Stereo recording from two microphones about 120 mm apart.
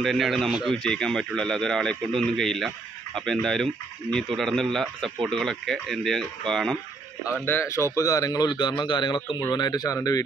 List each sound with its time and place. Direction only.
0.0 s a man's voice: centre (ahead or behind)
7.3 s speech: 20° left (ahead or behind)